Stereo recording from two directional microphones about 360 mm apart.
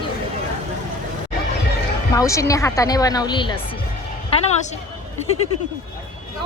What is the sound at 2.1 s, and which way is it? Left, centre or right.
A woman's voice, centre.